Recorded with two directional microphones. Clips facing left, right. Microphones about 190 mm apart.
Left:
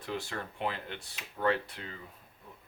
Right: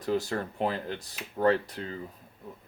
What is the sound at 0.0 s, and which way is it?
Speech, 40° right (ahead or behind).